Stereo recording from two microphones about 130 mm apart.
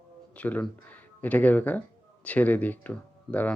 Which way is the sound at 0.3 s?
10° left (ahead or behind).